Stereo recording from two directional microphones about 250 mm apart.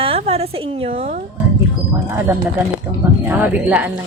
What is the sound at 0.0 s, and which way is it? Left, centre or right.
A woman's voice, right.